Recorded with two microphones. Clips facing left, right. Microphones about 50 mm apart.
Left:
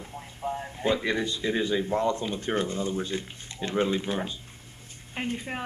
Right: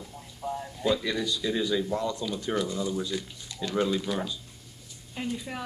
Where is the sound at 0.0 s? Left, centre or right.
Left.